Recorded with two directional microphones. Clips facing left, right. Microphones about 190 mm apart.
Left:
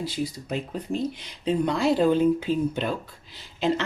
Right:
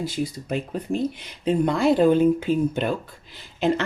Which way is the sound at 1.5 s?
50° right (ahead or behind).